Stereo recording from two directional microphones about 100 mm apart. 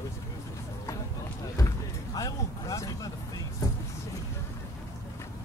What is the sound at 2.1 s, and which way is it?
Vehicle, 35° left (ahead or behind).